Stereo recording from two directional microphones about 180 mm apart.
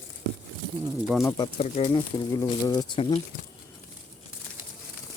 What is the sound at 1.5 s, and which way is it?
Speech, 35° left (ahead or behind).